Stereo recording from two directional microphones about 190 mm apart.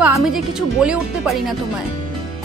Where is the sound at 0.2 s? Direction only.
Centre (ahead or behind).